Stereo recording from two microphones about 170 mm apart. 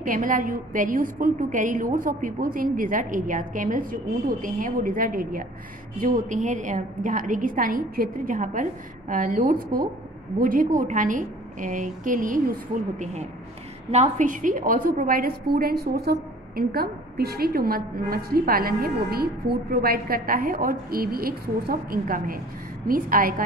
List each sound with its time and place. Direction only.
0.0 s a woman's voice: 50° right (ahead or behind)
13.0 s a woman's voice: 40° right (ahead or behind)